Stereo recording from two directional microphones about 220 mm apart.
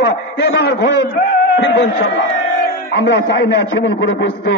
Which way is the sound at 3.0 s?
50° left (ahead or behind).